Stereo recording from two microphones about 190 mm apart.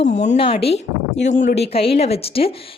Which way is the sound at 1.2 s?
40° left (ahead or behind).